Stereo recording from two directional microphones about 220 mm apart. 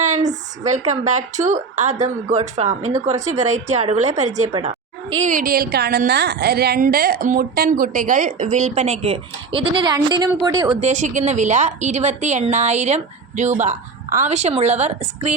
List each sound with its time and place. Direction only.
0.0 s a sound: 35° right (ahead or behind)
1.0 s a woman's voice: 35° right (ahead or behind)
10.8 s a woman's voice: 35° right (ahead or behind)